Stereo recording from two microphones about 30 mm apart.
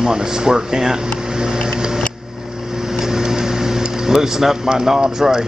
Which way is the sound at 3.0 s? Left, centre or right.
Centre.